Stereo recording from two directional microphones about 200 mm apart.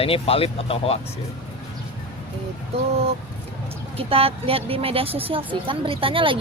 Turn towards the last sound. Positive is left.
turn(degrees=-25)  # may be behind; listen again after turning